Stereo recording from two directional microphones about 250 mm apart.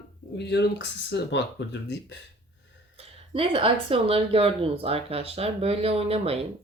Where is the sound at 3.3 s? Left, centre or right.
Right.